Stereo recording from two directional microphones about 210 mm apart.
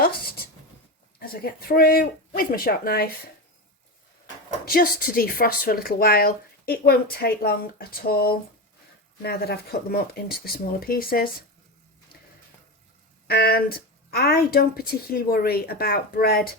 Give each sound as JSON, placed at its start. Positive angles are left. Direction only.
{"t": 1.2, "sound": "speech", "side_deg": 45}
{"t": 4.7, "sound": "speech", "side_deg": 45}
{"t": 13.2, "sound": "speech", "side_deg": 45}